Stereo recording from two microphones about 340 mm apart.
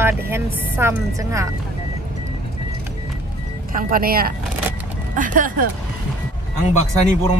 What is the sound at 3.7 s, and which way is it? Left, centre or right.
Speech, right.